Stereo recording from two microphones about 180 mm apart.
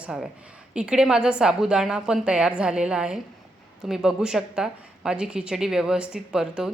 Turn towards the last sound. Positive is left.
turn(degrees=-5)  # may be behind; listen again after turning